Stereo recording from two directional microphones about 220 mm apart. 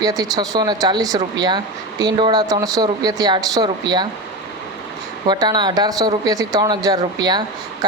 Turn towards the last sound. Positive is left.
turn(degrees=-20)  # may be behind; listen again after turning